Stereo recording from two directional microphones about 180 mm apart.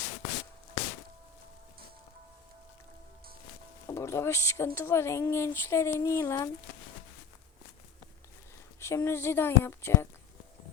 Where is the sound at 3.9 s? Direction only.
15° left (ahead or behind).